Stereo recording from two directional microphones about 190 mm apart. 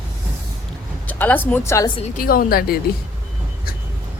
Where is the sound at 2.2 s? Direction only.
50° left (ahead or behind).